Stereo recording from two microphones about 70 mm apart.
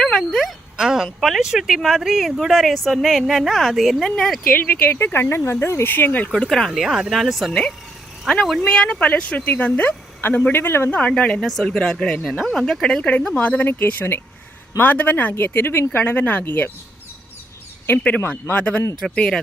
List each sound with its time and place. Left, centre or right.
0.0 s a sound: centre
0.8 s speech: centre
4.5 s speech: left
6.3 s speech: centre
6.7 s speech: centre; by 10.9 s left
10.9 s speech: centre
18.3 s speech: left
18.9 s speech: centre